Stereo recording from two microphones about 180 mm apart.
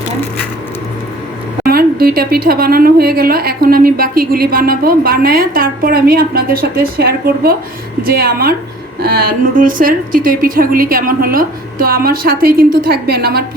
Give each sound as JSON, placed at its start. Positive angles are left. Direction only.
{"t": 1.6, "sound": "speech", "side_deg": -55}